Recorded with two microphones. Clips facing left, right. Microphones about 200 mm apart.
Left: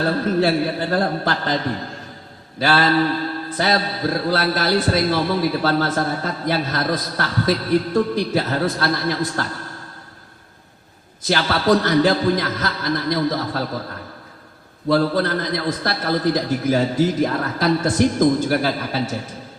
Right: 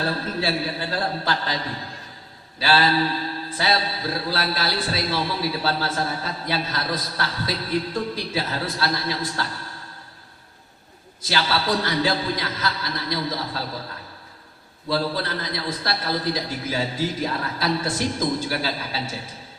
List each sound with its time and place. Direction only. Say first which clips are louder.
0.0 s a man's voice: left 7 dB; 50° left (ahead or behind)
11.3 s a man's voice: left 6 dB; 50° left (ahead or behind)
14.8 s a man's voice: left 7 dB; 50° left (ahead or behind)